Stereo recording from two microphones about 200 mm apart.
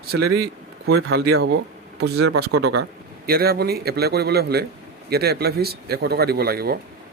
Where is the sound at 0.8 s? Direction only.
90° right.